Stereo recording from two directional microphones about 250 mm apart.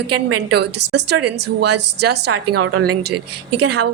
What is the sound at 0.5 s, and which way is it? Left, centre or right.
A woman's voice, right.